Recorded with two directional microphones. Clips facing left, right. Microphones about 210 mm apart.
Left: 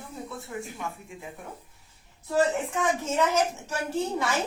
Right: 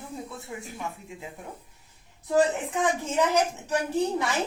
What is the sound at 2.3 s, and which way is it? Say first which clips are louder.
A woman's voice: right 2 dB; 15° right (ahead or behind).